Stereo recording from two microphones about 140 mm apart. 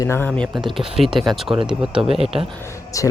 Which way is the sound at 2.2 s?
45° right (ahead or behind).